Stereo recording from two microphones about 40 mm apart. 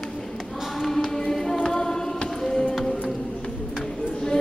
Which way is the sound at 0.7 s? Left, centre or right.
Centre.